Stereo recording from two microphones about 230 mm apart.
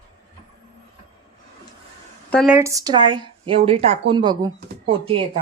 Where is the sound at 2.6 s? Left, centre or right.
Centre.